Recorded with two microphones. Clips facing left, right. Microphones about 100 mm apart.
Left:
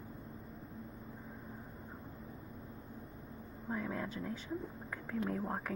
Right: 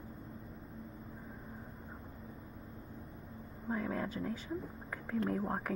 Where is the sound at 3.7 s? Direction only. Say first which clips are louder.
Right 2 dB; centre (ahead or behind).